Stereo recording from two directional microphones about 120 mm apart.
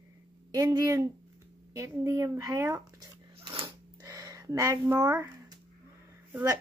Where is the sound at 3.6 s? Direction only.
30° right (ahead or behind).